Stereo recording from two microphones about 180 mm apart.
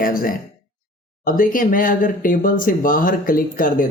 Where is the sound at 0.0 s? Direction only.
50° left (ahead or behind).